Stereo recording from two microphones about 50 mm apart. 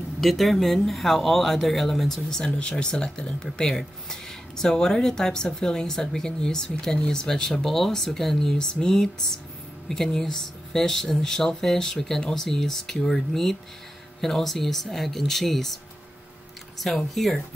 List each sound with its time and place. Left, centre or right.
0.2 s speech: centre
16.8 s speech: centre